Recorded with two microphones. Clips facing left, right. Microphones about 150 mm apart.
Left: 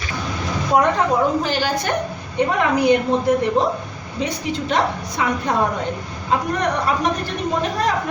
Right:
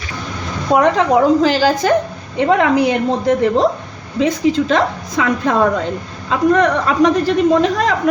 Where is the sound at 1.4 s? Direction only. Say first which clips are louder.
Right 8 dB; 90° right.